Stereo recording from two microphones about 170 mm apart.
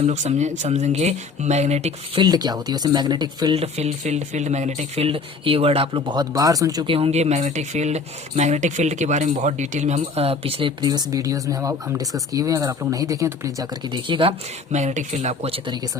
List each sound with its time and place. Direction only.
0.0 s speech: 40° right (ahead or behind)
2.2 s speech: 25° right (ahead or behind)
6.9 s speech: 35° right (ahead or behind)
14.7 s speech: 45° right (ahead or behind)